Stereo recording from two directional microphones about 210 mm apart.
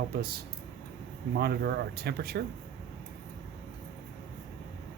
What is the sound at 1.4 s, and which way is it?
Speech, 50° right (ahead or behind).